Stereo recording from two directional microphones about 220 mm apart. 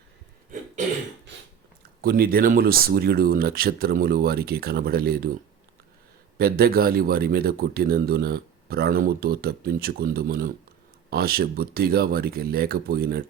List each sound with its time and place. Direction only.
2.0 s speech: 45° right (ahead or behind)
6.4 s speech: 45° right (ahead or behind)